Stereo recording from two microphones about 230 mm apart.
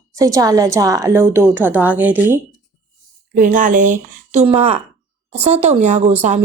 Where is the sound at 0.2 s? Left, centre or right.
Centre.